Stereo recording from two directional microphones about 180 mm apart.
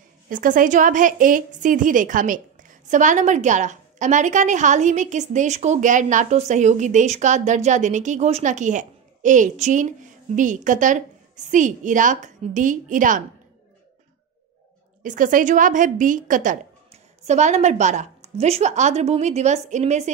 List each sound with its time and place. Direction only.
0.3 s a woman's voice: 50° right (ahead or behind)
15.0 s a woman's voice: 45° right (ahead or behind)